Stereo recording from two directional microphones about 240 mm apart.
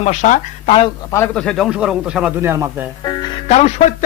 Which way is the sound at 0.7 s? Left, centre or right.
Centre.